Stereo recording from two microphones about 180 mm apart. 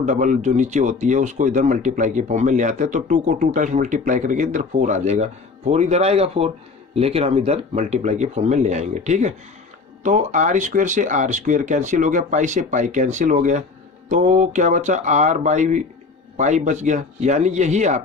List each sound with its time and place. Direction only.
0.0 s speech: 45° right (ahead or behind)